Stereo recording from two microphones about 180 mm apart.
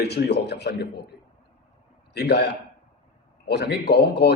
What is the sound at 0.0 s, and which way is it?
A man's voice, 65° left (ahead or behind).